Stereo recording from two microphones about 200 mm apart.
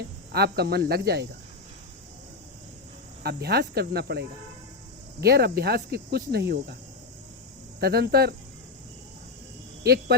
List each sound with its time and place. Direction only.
0.3 s speech: 55° right (ahead or behind)
3.2 s speech: 55° right (ahead or behind)
7.8 s speech: 50° right (ahead or behind)
9.8 s speech: 50° right (ahead or behind)